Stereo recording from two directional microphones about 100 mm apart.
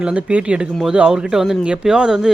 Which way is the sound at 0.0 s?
10° right (ahead or behind).